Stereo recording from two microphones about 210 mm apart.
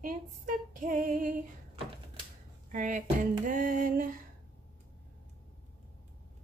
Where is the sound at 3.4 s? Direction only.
40° right (ahead or behind).